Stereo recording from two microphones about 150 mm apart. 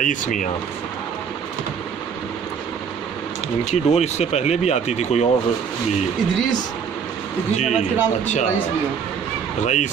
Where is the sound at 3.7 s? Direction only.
45° left (ahead or behind).